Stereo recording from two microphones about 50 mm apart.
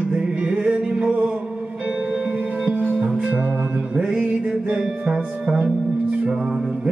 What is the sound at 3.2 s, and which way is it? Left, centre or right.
Music, right.